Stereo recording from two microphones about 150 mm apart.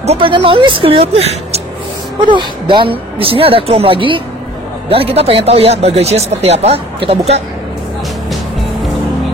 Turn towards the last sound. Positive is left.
turn(degrees=-40)  # may be behind; listen again after turning